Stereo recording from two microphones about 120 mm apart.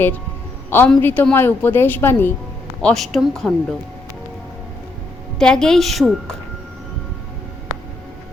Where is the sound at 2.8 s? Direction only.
Centre (ahead or behind).